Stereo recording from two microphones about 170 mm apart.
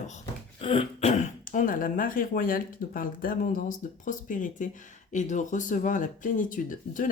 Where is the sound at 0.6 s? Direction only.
30° left (ahead or behind).